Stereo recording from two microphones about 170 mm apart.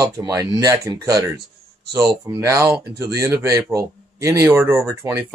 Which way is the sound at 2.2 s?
15° right (ahead or behind).